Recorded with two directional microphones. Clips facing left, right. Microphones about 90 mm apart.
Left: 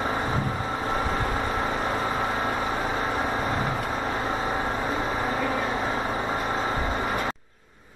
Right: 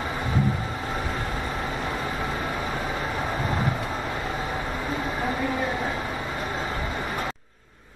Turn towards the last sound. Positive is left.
turn(degrees=30)  # may be behind; listen again after turning